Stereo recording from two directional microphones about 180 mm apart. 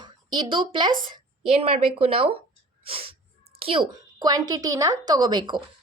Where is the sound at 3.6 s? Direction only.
25° right (ahead or behind).